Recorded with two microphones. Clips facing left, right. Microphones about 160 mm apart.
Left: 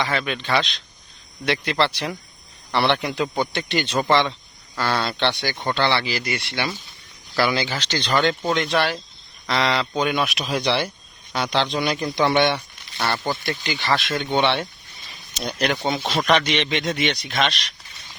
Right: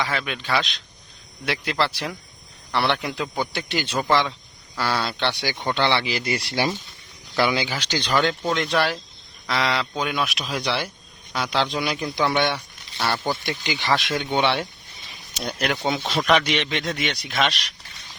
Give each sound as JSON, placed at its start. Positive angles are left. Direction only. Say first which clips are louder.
{"t": 0.0, "sound": "speech", "louder": "left 2 dB", "side_deg": 0}
{"t": 6.2, "sound": "speech", "louder": "right 2 dB", "side_deg": -35}
{"t": 7.3, "sound": "speech", "louder": "even", "side_deg": -15}